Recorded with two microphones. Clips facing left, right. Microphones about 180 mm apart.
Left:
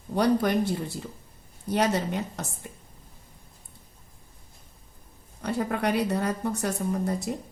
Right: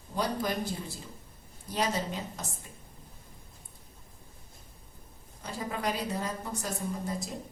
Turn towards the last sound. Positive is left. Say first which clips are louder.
# left 7 dB
turn(degrees=65)  # may be behind; listen again after turning